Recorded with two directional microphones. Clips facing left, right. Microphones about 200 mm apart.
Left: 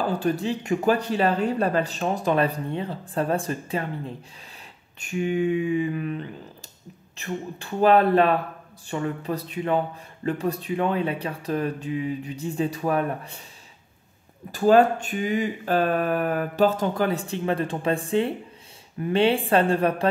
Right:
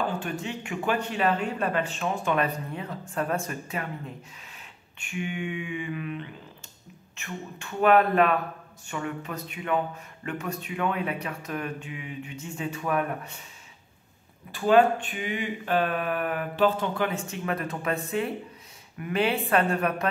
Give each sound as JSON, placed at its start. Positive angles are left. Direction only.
{"t": 0.2, "sound": "speech", "side_deg": 35}
{"t": 14.5, "sound": "speech", "side_deg": 40}